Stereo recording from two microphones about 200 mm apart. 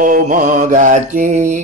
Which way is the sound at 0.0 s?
40° right (ahead or behind).